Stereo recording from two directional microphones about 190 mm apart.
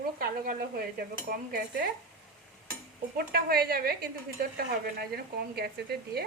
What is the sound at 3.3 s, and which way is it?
A woman's voice, 55° right (ahead or behind).